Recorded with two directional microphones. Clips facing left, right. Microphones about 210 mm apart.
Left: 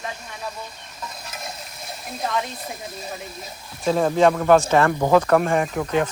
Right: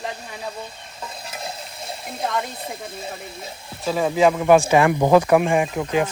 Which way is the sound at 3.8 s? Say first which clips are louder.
Left 1 dB; 5° right (ahead or behind).